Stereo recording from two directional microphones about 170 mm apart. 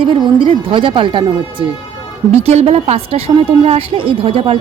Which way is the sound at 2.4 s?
40° right (ahead or behind).